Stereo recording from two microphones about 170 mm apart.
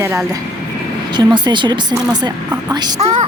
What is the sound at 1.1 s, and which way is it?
Speech, 25° right (ahead or behind).